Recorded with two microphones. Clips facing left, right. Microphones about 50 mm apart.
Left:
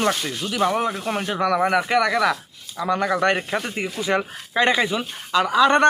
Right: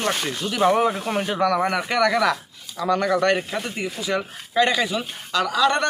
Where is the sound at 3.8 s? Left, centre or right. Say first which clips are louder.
Left 2 dB; left.